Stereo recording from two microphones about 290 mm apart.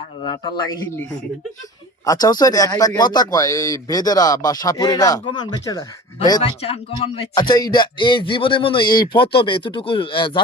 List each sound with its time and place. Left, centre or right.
0.2 s a man's voice: centre
2.0 s a man's voice: centre